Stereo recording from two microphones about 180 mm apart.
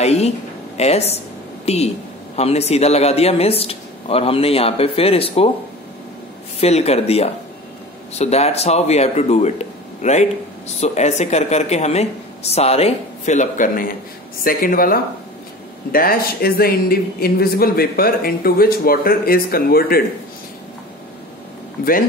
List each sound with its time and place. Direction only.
0.0 s speech: 35° left (ahead or behind)
6.6 s speech: 35° left (ahead or behind); by 20.0 s 55° left (ahead or behind)